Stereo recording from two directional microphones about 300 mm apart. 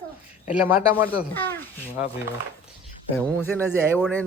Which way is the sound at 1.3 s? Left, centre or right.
Centre.